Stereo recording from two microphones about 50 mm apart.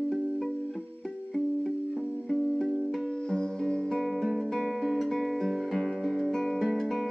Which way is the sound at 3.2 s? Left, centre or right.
Centre.